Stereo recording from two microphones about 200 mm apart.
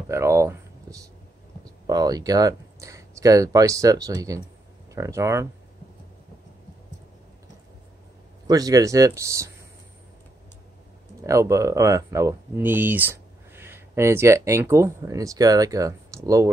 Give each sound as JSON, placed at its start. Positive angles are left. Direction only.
{"t": 0.1, "sound": "a sound", "side_deg": -15}
{"t": 1.9, "sound": "speech", "side_deg": -20}
{"t": 8.5, "sound": "speech", "side_deg": -20}
{"t": 11.1, "sound": "speech", "side_deg": -15}